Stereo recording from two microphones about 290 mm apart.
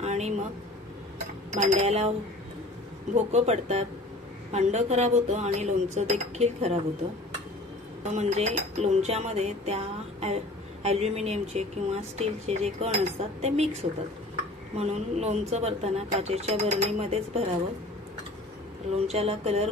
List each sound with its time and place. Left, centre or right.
0.0 s a sound: right
1.5 s speech: right
8.0 s speech: right
19.0 s speech: right